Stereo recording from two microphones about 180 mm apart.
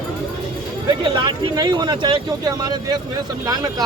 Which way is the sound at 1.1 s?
25° right (ahead or behind).